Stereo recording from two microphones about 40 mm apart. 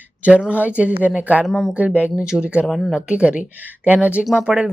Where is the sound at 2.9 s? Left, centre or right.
Right.